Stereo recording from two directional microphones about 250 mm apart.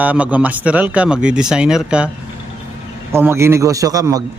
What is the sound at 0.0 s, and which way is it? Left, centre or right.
Speech, centre.